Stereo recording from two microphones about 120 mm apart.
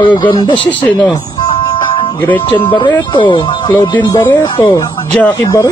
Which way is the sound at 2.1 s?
15° left (ahead or behind).